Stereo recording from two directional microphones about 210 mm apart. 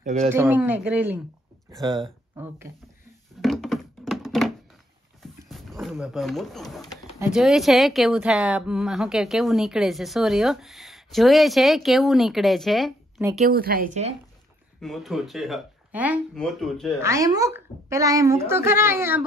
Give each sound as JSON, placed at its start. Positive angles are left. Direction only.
{"t": 0.0, "sound": "speech", "side_deg": -35}
{"t": 0.3, "sound": "a woman's voice", "side_deg": -10}
{"t": 1.7, "sound": "a woman's voice", "side_deg": -20}
{"t": 3.3, "sound": "a sound", "side_deg": 0}
{"t": 5.2, "sound": "speech", "side_deg": 0}
{"t": 13.5, "sound": "speech", "side_deg": -45}
{"t": 14.8, "sound": "speech", "side_deg": 0}
{"t": 17.0, "sound": "a woman's voice", "side_deg": -15}